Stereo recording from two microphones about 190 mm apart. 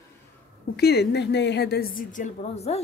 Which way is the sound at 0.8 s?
60° left (ahead or behind).